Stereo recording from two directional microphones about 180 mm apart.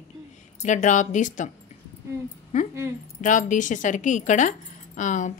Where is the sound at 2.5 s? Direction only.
45° left (ahead or behind).